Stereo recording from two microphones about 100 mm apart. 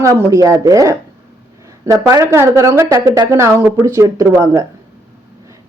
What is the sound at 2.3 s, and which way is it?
Speech, 30° right (ahead or behind).